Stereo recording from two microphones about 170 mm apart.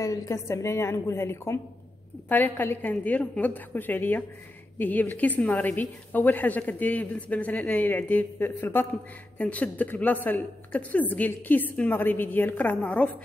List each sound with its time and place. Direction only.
0.0 s a woman's voice: 20° left (ahead or behind)